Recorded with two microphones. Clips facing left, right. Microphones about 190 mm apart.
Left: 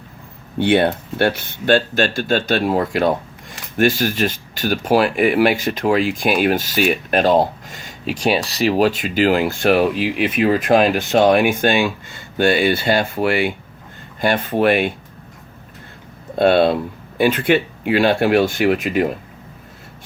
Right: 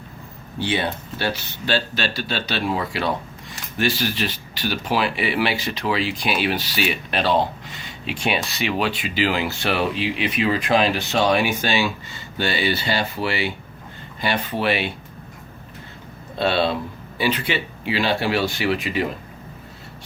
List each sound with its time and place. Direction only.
0.6 s speech: 60° left (ahead or behind)
16.3 s speech: 55° left (ahead or behind)